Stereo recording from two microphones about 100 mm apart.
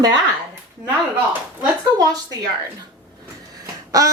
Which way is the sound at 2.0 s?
40° right (ahead or behind).